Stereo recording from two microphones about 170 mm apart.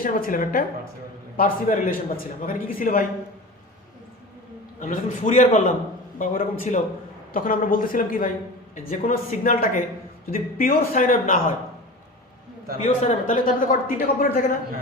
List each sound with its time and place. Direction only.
0.0 s a man's voice: 55° left (ahead or behind)
4.8 s a man's voice: 50° left (ahead or behind)
12.8 s a man's voice: 45° left (ahead or behind)